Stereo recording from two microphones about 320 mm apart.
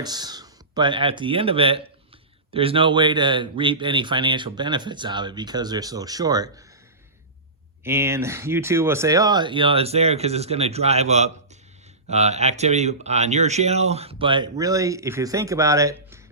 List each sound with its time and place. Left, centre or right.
0.0 s a man's voice: centre
7.9 s a man's voice: centre